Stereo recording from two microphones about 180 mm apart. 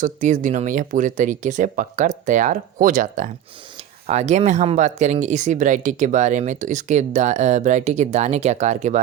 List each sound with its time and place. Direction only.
0.0 s speech: 45° right (ahead or behind)